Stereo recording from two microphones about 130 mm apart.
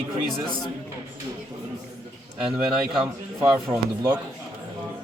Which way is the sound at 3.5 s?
20° right (ahead or behind).